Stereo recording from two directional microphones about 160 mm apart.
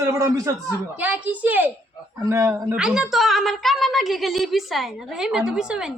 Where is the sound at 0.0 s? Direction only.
15° right (ahead or behind).